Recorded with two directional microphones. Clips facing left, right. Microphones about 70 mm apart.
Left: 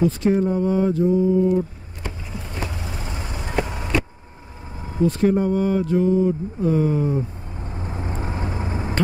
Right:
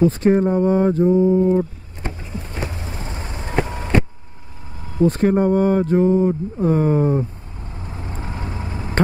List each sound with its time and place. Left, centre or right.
0.0 s mantra: right
5.0 s speech: right
7.6 s vehicle: left